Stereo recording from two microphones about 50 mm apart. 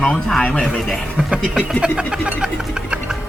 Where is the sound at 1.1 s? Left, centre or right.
Right.